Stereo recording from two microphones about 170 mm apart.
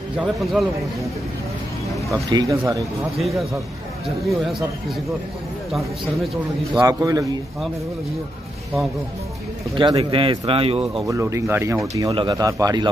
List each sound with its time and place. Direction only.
0.2 s a man's voice: centre (ahead or behind)
2.1 s speech: 20° right (ahead or behind)
3.2 s a man's voice: centre (ahead or behind)
6.8 s speech: 20° right (ahead or behind)
9.8 s speech: 25° right (ahead or behind)
11.1 s speech: 20° right (ahead or behind)